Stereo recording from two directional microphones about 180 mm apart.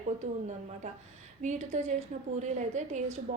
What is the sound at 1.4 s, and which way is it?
A woman's voice, 40° right (ahead or behind).